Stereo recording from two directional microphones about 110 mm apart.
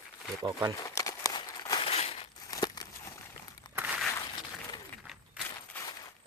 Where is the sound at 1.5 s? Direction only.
30° left (ahead or behind).